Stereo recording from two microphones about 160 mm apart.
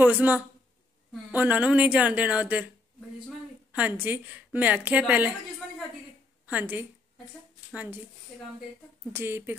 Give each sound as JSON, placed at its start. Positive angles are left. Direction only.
{"t": 0.0, "sound": "a woman's voice", "side_deg": -10}
{"t": 3.7, "sound": "a woman's voice", "side_deg": -10}
{"t": 6.4, "sound": "a woman's voice", "side_deg": -10}
{"t": 9.1, "sound": "a woman's voice", "side_deg": -15}